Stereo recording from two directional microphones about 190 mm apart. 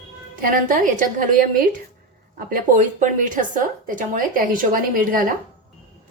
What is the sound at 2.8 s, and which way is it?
A woman's voice, 45° right (ahead or behind).